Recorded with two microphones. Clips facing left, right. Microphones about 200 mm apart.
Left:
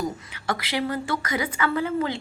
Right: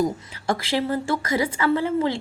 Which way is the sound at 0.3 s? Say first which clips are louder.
Right 3 dB; 30° right (ahead or behind).